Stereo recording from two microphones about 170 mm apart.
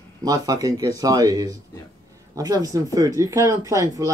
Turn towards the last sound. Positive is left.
turn(degrees=-20)  # may be behind; listen again after turning